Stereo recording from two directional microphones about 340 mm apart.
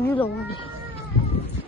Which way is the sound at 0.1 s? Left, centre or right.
Centre.